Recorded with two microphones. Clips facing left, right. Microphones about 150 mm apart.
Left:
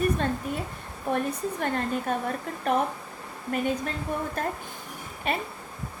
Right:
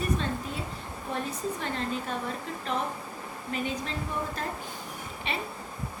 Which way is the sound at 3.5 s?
50° left (ahead or behind).